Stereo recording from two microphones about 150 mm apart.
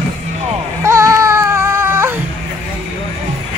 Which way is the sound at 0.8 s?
20° right (ahead or behind).